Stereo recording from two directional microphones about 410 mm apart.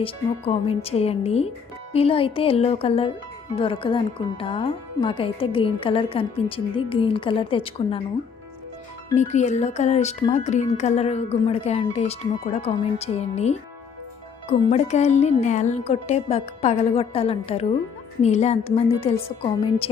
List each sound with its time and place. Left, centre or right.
0.0 s speech: centre
9.1 s speech: centre